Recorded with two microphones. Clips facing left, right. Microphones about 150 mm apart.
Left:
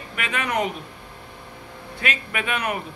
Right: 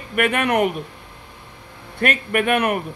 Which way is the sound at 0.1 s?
55° right (ahead or behind).